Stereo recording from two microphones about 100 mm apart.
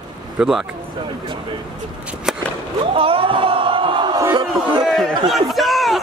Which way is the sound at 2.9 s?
65° right (ahead or behind).